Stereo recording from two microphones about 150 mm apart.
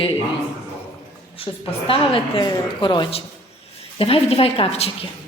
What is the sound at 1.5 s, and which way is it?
A woman's voice, 35° left (ahead or behind).